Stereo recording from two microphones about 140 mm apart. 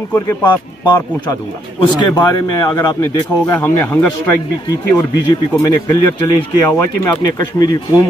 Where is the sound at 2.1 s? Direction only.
30° left (ahead or behind).